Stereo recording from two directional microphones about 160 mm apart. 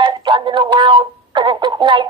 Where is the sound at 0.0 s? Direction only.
30° right (ahead or behind).